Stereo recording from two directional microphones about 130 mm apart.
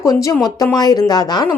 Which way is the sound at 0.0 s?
25° left (ahead or behind).